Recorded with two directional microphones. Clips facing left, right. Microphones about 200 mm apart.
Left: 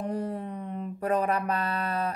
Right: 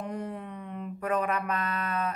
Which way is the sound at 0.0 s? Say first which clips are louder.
Left 4 dB; 35° left (ahead or behind).